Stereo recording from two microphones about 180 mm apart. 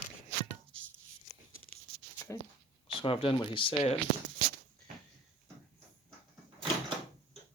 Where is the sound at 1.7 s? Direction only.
10° left (ahead or behind).